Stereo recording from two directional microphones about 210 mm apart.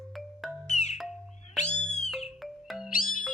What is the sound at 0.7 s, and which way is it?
Music, 30° left (ahead or behind).